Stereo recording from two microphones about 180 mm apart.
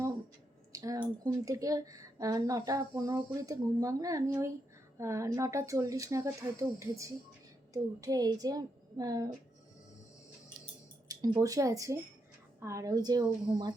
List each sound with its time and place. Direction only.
0.7 s a sound: 20° right (ahead or behind)
1.2 s speech: 20° right (ahead or behind)
11.3 s speech: 20° right (ahead or behind)